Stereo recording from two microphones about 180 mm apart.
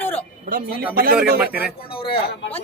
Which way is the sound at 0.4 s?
50° right (ahead or behind).